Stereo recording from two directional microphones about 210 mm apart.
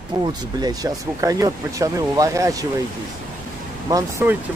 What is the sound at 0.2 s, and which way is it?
Speech, 20° right (ahead or behind).